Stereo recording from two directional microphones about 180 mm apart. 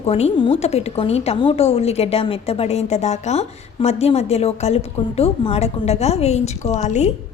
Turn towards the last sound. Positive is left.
turn(degrees=40)  # may be behind; listen again after turning